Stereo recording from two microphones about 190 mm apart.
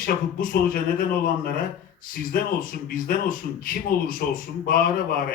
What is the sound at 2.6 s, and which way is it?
A man's voice, 50° left (ahead or behind).